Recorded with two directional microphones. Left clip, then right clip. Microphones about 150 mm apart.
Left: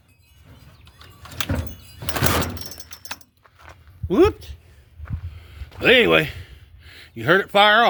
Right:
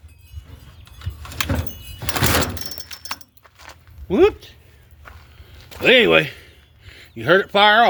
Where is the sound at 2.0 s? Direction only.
10° right (ahead or behind).